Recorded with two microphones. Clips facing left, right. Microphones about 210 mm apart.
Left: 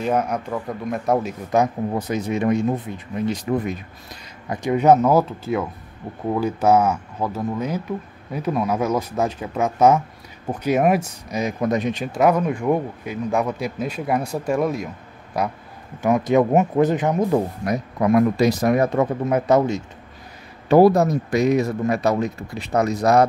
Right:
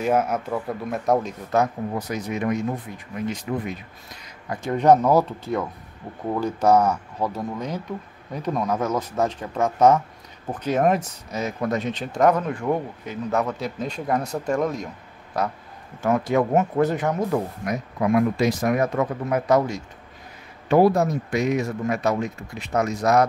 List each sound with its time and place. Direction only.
0.0 s speech: 5° right (ahead or behind)
1.5 s speech: 20° left (ahead or behind)
4.5 s a man's voice: 10° left (ahead or behind)
17.6 s speech: 35° left (ahead or behind)
20.6 s speech: 35° left (ahead or behind)